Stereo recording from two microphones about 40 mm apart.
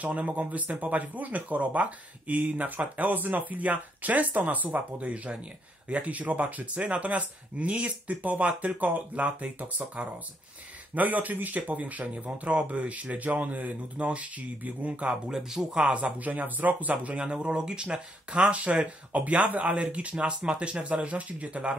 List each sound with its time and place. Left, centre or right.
0.0 s speech: right
11.0 s speech: right
15.3 s speech: centre
15.8 s speech: right
16.2 s speech: right
17.2 s speech: right
17.9 s speech: right